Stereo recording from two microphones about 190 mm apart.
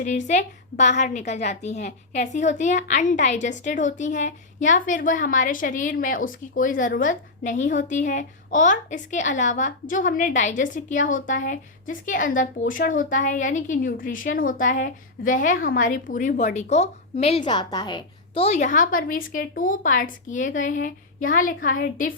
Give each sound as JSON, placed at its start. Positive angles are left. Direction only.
{"t": 0.0, "sound": "a woman's voice", "side_deg": 40}